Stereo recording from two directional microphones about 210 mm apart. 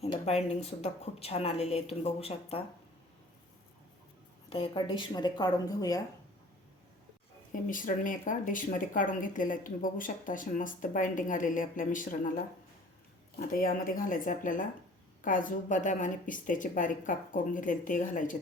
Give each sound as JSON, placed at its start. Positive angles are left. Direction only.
{"t": 0.0, "sound": "a woman's voice", "side_deg": 30}
{"t": 4.4, "sound": "a woman's voice", "side_deg": 25}
{"t": 7.7, "sound": "speech", "side_deg": 40}
{"t": 13.5, "sound": "speech", "side_deg": 40}